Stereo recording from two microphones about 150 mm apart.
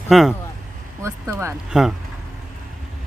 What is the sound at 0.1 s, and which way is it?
Speech, centre (ahead or behind).